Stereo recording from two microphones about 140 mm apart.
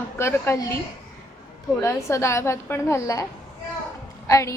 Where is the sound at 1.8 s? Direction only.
20° left (ahead or behind).